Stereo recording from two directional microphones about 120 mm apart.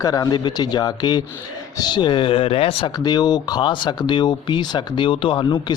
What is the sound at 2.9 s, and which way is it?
Speech, 35° left (ahead or behind).